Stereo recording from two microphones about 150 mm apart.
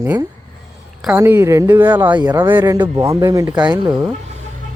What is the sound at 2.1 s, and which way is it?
Speech, 25° right (ahead or behind).